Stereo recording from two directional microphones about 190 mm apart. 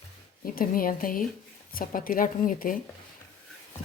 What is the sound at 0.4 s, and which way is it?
Speech, 50° left (ahead or behind).